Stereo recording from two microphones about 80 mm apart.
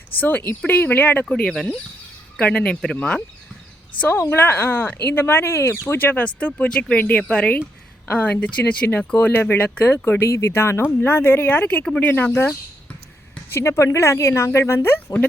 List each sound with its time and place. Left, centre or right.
0.2 s speech: left
1.3 s speech: centre
4.2 s speech: left
13.5 s speech: left